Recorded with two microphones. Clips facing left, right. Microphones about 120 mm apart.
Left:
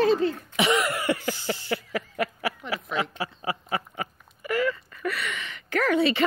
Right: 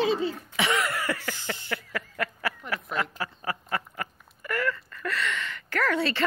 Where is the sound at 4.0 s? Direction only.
15° left (ahead or behind).